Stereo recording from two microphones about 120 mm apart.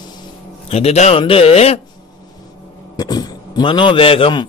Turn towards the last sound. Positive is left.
turn(degrees=45)  # may be behind; listen again after turning